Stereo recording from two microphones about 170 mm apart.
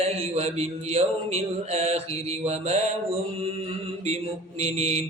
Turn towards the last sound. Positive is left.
turn(degrees=-40)  # may be behind; listen again after turning